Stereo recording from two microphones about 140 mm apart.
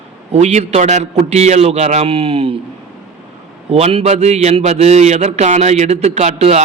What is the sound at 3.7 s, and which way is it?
A man's voice, 45° right (ahead or behind).